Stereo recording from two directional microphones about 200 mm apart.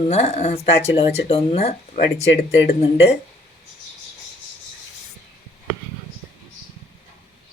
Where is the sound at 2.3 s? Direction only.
55° left (ahead or behind).